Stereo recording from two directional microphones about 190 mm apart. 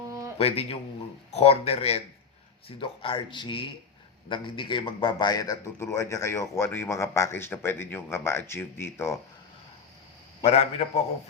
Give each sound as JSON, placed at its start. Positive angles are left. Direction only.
{"t": 0.0, "sound": "a sound", "side_deg": -20}
{"t": 0.3, "sound": "a man's voice", "side_deg": 30}
{"t": 10.4, "sound": "speech", "side_deg": 35}